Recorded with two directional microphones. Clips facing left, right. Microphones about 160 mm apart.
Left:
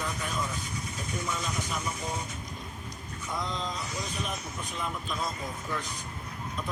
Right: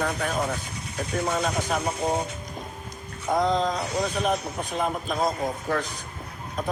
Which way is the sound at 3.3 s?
90° right.